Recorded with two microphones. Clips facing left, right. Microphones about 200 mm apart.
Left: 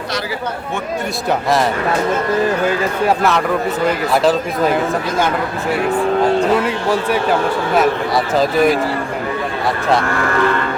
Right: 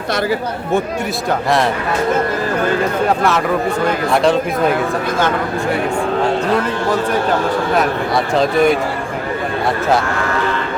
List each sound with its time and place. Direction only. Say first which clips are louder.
4.1 s speech: right 3 dB; centre (ahead or behind)
7.8 s speech: left 1 dB; centre (ahead or behind)